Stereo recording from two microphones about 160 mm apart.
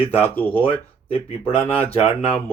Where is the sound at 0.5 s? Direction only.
35° left (ahead or behind).